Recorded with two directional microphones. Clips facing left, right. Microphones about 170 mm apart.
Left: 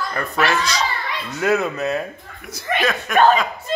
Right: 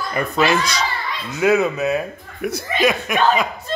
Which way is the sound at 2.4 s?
65° right (ahead or behind).